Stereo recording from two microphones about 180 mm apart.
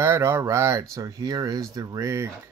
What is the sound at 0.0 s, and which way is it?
Speech, 15° right (ahead or behind).